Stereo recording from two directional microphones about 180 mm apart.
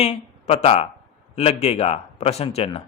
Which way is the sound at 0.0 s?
35° left (ahead or behind).